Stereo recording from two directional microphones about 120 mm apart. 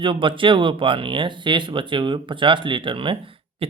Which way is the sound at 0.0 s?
45° right (ahead or behind).